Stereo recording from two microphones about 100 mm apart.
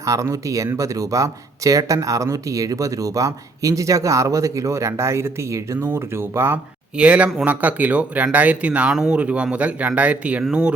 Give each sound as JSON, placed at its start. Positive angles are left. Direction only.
{"t": 0.0, "sound": "speech", "side_deg": -30}
{"t": 6.9, "sound": "speech", "side_deg": -10}